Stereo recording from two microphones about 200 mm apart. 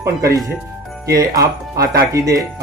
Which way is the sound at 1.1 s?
15° right (ahead or behind).